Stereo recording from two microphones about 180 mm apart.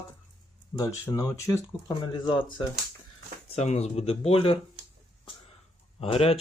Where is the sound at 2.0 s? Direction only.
25° left (ahead or behind).